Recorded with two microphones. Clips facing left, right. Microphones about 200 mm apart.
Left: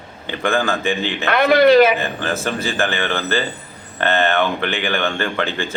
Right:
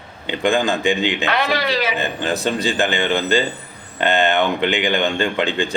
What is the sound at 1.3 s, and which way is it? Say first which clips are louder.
Speech: left 14 dB; 55° left (ahead or behind).